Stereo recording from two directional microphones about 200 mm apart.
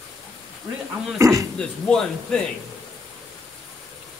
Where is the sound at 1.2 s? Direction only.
15° right (ahead or behind).